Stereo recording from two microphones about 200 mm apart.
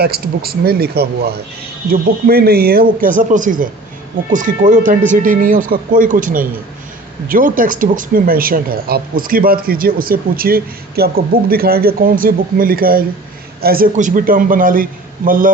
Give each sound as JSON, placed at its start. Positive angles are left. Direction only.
{"t": 0.0, "sound": "speech", "side_deg": -50}